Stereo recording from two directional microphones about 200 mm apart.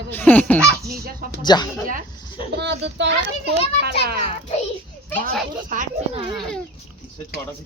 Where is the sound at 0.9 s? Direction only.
50° right (ahead or behind).